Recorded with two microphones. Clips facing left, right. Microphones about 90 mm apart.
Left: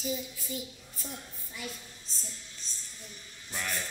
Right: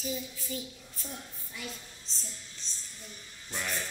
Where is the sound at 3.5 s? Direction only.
5° left (ahead or behind).